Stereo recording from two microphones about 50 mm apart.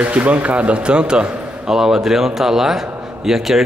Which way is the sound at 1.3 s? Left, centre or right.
Right.